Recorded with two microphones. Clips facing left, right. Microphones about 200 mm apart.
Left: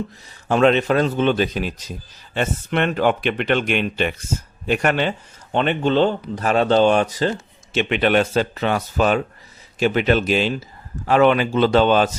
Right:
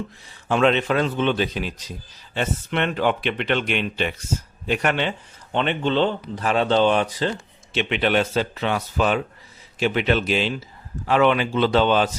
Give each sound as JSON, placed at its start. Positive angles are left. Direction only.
{"t": 0.4, "sound": "speech", "side_deg": 45}